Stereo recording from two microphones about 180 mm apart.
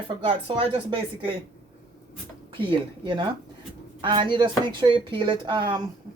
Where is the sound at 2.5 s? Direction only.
25° right (ahead or behind).